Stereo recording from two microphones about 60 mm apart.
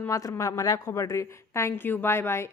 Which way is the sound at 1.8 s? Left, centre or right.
Left.